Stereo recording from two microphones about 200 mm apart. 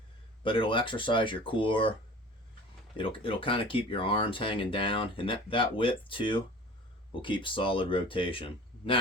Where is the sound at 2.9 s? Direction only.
25° left (ahead or behind).